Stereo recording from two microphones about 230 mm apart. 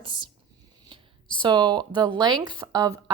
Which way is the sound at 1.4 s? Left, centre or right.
Centre.